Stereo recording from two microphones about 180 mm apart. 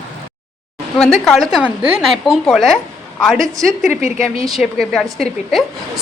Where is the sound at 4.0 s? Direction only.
40° left (ahead or behind).